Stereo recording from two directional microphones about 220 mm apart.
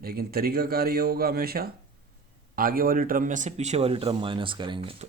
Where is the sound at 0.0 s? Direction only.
45° right (ahead or behind).